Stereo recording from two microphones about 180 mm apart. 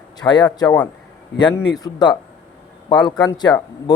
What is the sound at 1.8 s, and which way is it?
Speech, 25° left (ahead or behind).